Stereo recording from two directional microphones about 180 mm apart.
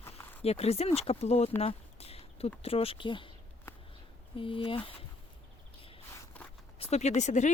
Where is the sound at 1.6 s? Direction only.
35° left (ahead or behind).